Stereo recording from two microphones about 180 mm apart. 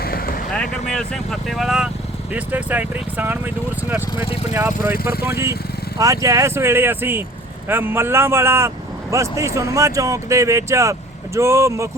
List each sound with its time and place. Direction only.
0.0 s boat: 55° left (ahead or behind)
0.5 s speech: 5° left (ahead or behind); by 4.0 s 10° right (ahead or behind)
5.2 s speech: 15° right (ahead or behind)